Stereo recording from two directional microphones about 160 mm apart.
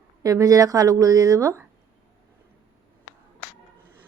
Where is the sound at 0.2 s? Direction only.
20° right (ahead or behind).